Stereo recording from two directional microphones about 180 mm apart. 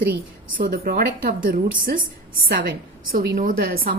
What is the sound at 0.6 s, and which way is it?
A woman's voice, 55° right (ahead or behind).